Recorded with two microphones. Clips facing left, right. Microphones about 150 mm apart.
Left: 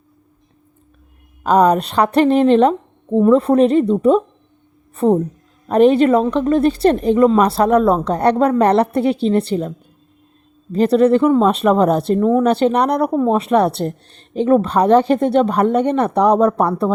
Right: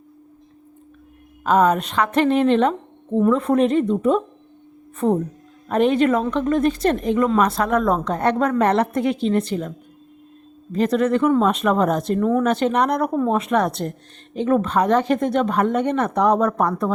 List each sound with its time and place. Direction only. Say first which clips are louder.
1.5 s a woman's voice: left 4 dB; 35° left (ahead or behind)